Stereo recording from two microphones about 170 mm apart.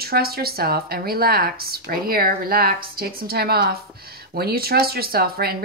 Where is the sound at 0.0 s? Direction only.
65° right (ahead or behind).